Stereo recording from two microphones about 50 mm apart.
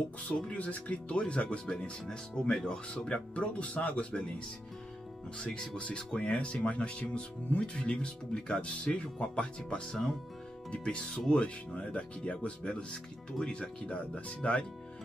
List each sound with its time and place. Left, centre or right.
0.5 s speech: left
2.0 s speech: centre
5.4 s speech: centre